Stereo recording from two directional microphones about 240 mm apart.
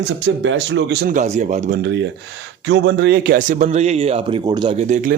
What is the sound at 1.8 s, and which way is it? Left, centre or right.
A man's voice, right.